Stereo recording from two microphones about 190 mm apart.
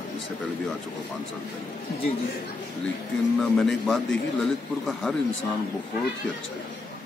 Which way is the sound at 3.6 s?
5° left (ahead or behind).